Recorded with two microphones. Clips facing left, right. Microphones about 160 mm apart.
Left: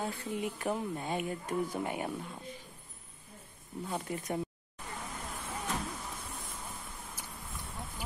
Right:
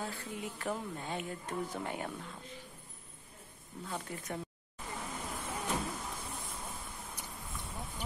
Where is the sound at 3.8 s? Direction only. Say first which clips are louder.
Left 4 dB; 15° left (ahead or behind).